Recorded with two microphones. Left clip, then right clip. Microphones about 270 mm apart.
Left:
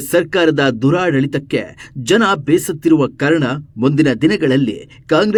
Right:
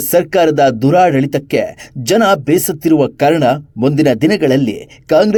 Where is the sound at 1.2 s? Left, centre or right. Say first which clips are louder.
Right 4 dB; centre.